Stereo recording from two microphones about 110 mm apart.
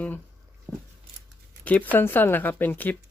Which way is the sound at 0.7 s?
25° right (ahead or behind).